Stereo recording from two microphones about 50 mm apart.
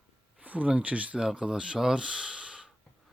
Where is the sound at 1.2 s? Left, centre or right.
Centre.